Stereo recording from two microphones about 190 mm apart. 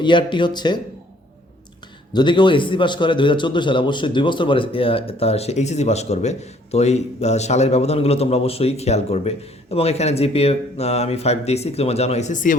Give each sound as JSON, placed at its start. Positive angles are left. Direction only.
{"t": 0.0, "sound": "speech", "side_deg": 25}
{"t": 2.1, "sound": "a man's voice", "side_deg": 25}